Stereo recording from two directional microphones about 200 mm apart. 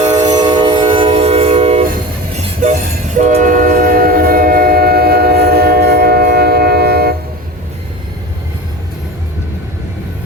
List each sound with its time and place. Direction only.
0.0 s train: 35° right (ahead or behind)
0.3 s train: 20° right (ahead or behind); by 7.2 s 50° right (ahead or behind)